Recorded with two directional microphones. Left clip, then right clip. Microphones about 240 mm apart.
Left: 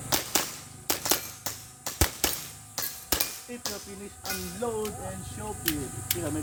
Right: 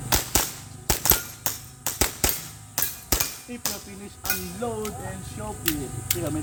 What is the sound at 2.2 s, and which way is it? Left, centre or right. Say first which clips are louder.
Music: right 4 dB; centre.